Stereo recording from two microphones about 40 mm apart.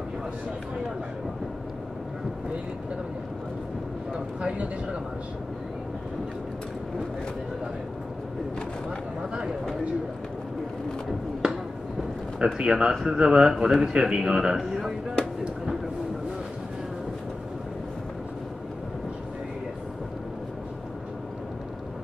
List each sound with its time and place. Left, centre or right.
4.4 s speech: right
11.4 s a sound: centre
12.5 s speech: centre